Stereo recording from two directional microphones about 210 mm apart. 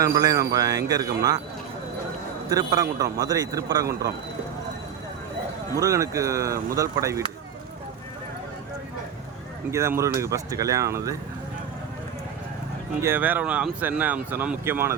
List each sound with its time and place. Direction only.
0.0 s speech: 15° right (ahead or behind)
2.5 s speech: 15° right (ahead or behind)
5.8 s speech: 15° right (ahead or behind)
9.7 s speech: 15° right (ahead or behind)
13.0 s speech: 10° right (ahead or behind)